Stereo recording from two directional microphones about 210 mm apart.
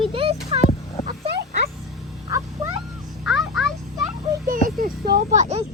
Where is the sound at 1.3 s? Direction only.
50° right (ahead or behind).